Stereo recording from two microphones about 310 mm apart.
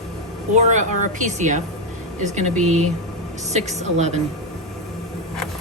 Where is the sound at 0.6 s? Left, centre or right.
Right.